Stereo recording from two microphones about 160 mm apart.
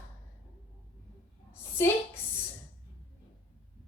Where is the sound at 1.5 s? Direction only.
15° left (ahead or behind).